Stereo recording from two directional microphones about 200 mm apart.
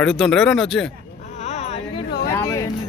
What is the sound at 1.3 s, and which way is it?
Music, 35° left (ahead or behind).